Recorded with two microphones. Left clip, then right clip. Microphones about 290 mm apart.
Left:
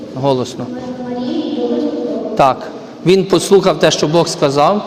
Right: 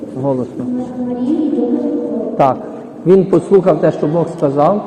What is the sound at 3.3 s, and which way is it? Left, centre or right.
A man's voice, left.